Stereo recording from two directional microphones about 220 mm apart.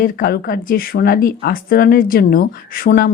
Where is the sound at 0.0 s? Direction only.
40° left (ahead or behind).